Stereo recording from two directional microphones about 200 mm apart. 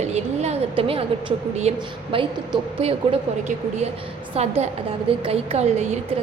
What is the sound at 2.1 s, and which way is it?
Speech, 25° right (ahead or behind).